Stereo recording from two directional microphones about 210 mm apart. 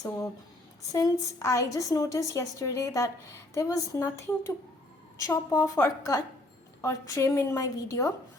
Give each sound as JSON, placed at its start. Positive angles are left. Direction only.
{"t": 0.9, "sound": "a woman's voice", "side_deg": 15}